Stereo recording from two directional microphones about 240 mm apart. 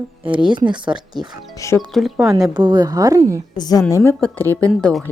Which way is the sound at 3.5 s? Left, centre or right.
Centre.